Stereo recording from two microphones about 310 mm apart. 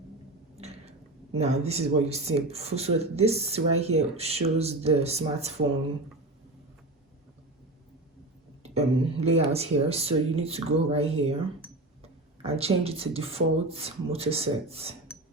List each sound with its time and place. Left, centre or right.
0.5 s speech: right
8.6 s speech: centre
12.4 s speech: centre